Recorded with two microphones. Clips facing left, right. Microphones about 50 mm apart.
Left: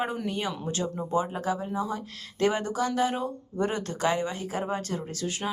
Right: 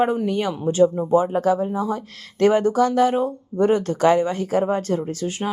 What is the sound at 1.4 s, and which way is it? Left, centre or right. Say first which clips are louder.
Speech: right 9 dB; right.